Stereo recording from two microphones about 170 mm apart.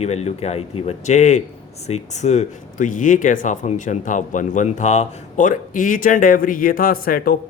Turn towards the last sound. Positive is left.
turn(degrees=60)  # may be behind; listen again after turning